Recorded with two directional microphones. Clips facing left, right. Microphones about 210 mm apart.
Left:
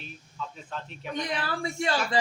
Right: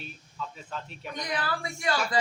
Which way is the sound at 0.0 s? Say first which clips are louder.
Even; centre (ahead or behind).